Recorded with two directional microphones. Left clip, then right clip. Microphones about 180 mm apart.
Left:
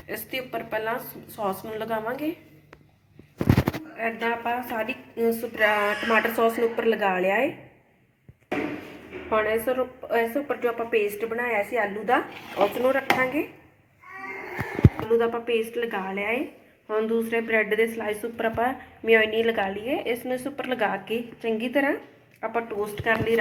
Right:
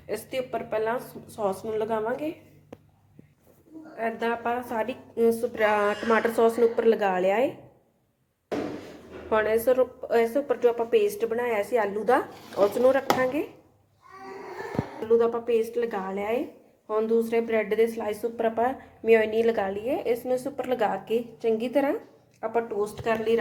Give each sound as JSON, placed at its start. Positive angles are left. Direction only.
{"t": 0.1, "sound": "speech", "side_deg": -15}
{"t": 3.9, "sound": "speech", "side_deg": -10}
{"t": 9.3, "sound": "speech", "side_deg": -15}
{"t": 15.1, "sound": "speech", "side_deg": -5}